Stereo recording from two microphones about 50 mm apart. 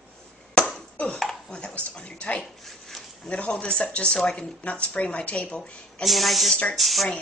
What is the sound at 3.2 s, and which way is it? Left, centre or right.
A woman's voice, left.